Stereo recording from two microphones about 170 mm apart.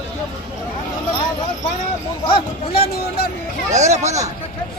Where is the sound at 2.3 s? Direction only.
30° left (ahead or behind).